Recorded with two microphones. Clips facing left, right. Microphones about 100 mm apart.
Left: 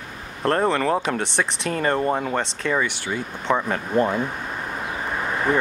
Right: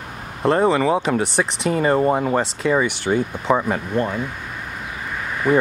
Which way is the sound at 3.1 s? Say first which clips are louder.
Right 8 dB; 35° right (ahead or behind).